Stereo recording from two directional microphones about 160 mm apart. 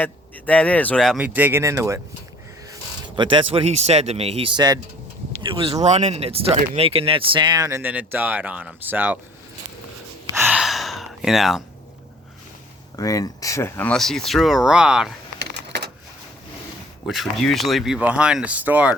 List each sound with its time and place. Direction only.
0.0 s a man's voice: 10° left (ahead or behind)
1.2 s speech: 10° right (ahead or behind)
3.2 s speech: 30° right (ahead or behind); by 9.1 s 10° right (ahead or behind)
10.3 s gasp: 10° right (ahead or behind)
10.6 s sigh: centre (ahead or behind)
13.0 s speech: 20° left (ahead or behind); by 15.1 s 5° right (ahead or behind)
15.4 s crushing: 90° right
17.1 s speech: centre (ahead or behind)